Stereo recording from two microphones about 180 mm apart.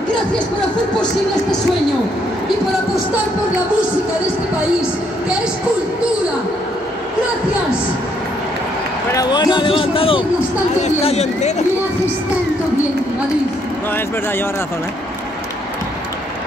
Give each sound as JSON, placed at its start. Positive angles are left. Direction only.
{"t": 9.1, "sound": "a man's voice", "side_deg": 20}